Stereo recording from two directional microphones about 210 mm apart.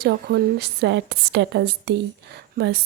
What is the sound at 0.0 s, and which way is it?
A woman's voice, 50° right (ahead or behind).